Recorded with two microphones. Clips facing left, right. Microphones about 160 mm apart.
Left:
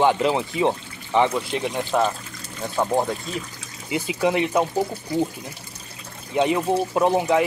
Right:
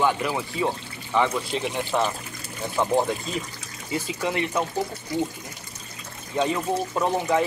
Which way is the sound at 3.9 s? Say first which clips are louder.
Left 5 dB; 15° left (ahead or behind).